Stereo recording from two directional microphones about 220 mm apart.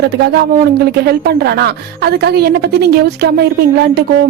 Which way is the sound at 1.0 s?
45° right (ahead or behind).